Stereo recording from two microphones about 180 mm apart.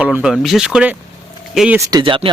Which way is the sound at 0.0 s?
5° right (ahead or behind).